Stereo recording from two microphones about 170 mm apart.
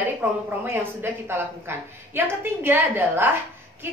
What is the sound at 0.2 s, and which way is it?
A woman's voice, 10° right (ahead or behind).